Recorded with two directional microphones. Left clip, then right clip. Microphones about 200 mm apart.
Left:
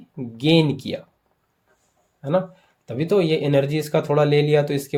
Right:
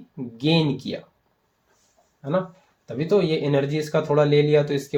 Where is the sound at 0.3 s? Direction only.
40° left (ahead or behind).